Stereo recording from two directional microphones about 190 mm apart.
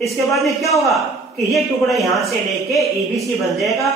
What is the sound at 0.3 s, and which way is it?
A woman's voice, centre (ahead or behind).